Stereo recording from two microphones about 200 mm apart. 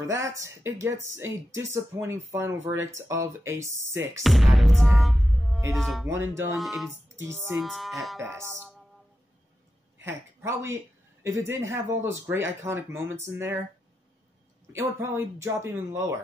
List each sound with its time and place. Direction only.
0.0 s speech: 15° right (ahead or behind)
4.2 s music: centre (ahead or behind)
5.7 s speech: centre (ahead or behind)
6.0 s speech: 15° right (ahead or behind)
6.5 s speech: centre (ahead or behind)
7.2 s speech: 10° right (ahead or behind)
7.5 s speech: centre (ahead or behind)
8.2 s speech: 15° right (ahead or behind)
9.9 s speech: 10° right (ahead or behind)
14.7 s speech: 15° right (ahead or behind)